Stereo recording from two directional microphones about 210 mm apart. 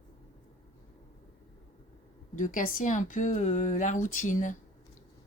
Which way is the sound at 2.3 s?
40° left (ahead or behind).